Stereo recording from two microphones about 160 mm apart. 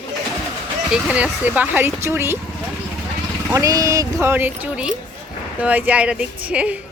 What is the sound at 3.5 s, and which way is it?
Speech, 20° right (ahead or behind).